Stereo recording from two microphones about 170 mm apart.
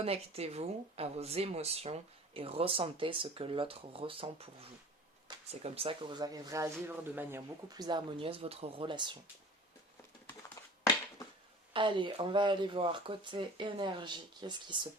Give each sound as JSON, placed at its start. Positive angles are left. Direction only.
{"t": 0.0, "sound": "speech", "side_deg": -35}
{"t": 5.5, "sound": "speech", "side_deg": -35}
{"t": 10.6, "sound": "a sound", "side_deg": 20}
{"t": 11.7, "sound": "speech", "side_deg": -30}